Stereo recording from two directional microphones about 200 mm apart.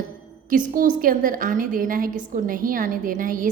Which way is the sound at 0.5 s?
40° right (ahead or behind).